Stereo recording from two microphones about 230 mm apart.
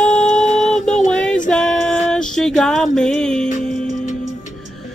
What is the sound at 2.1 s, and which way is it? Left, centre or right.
Music, centre.